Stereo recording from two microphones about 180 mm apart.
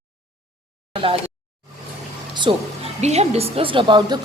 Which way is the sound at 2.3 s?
30° right (ahead or behind).